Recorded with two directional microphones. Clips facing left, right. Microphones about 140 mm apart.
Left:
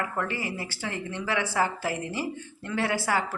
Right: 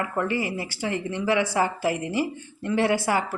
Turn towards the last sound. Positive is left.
turn(degrees=-15)  # may be behind; listen again after turning